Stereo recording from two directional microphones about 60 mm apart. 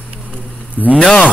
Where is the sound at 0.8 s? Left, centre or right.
Left.